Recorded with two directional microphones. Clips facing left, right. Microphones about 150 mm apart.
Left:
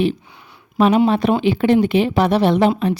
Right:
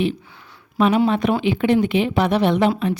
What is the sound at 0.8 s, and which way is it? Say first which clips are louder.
A woman's voice: left 3 dB; 35° left (ahead or behind).